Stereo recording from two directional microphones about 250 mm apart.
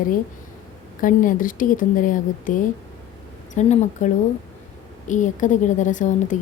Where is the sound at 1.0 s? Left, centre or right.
Left.